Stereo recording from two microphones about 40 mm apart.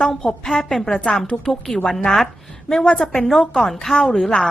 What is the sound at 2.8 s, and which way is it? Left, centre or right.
Speech, left.